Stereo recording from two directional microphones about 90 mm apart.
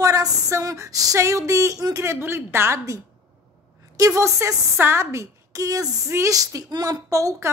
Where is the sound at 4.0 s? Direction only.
35° right (ahead or behind).